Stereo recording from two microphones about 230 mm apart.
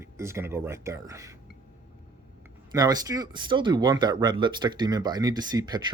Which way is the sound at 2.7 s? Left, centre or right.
Centre.